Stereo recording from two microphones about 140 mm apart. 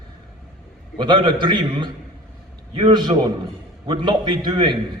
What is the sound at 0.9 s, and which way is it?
A man's voice, 35° right (ahead or behind).